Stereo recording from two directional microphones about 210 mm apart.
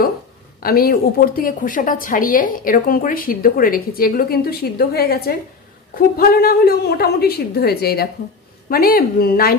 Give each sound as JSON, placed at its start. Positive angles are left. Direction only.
{"t": 0.6, "sound": "a woman's voice", "side_deg": 45}